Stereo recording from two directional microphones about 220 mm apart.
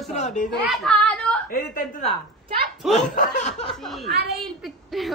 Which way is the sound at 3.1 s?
35° left (ahead or behind).